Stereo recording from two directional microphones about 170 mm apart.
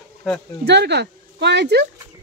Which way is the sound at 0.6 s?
80° right.